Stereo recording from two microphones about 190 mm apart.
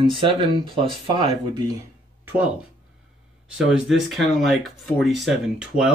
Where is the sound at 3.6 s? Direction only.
Centre (ahead or behind).